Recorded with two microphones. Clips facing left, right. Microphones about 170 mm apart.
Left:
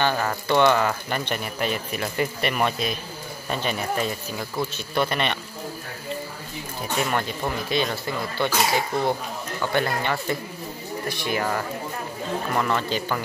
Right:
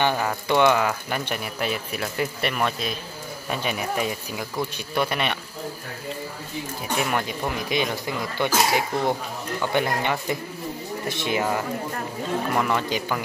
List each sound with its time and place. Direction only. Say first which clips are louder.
0.0 s speech: even; 10° right (ahead or behind)
3.4 s speech: left 1 dB; 10° right (ahead or behind)
7.0 s speech: left 1 dB; 5° right (ahead or behind)